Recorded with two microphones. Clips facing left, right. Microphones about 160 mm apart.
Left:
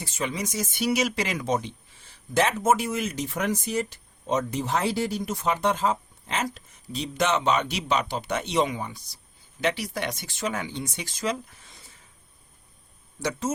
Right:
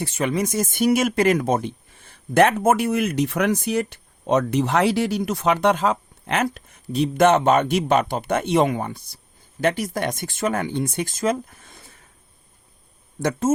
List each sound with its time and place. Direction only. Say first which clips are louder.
0.0 s speech: right 7 dB; 60° right (ahead or behind)
13.1 s speech: right 6 dB; 55° right (ahead or behind)